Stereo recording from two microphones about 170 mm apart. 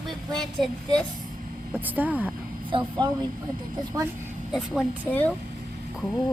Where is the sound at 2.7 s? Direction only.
25° right (ahead or behind).